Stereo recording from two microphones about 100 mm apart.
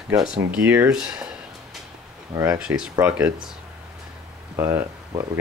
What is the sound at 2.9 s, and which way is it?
Speech, 20° right (ahead or behind).